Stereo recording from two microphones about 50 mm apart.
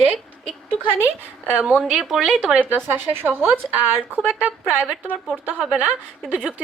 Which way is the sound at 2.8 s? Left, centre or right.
Right.